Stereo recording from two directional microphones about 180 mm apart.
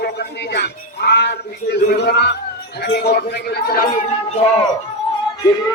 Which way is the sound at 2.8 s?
65° left (ahead or behind).